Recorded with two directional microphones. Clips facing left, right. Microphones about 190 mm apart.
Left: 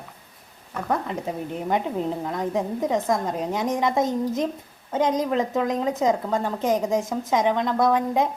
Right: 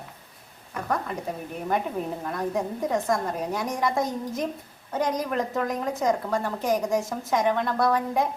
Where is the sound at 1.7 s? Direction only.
20° left (ahead or behind).